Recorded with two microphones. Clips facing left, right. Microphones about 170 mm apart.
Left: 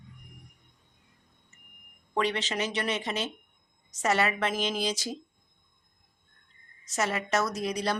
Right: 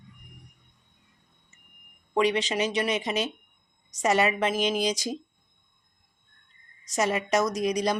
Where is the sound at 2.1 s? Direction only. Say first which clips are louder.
Right 5 dB; 15° right (ahead or behind).